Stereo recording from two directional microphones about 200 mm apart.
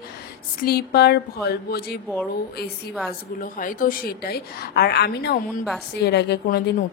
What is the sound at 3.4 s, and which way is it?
A woman's voice, 45° left (ahead or behind).